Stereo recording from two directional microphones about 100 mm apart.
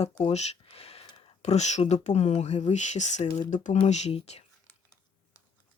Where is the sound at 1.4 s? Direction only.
90° left.